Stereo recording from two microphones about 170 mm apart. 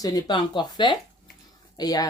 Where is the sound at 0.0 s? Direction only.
20° left (ahead or behind).